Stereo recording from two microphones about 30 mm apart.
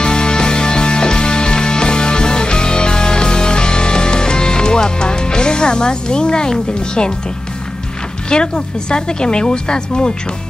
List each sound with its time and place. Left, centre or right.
0.0 s music: left
6.7 s speech: left
8.3 s speech: left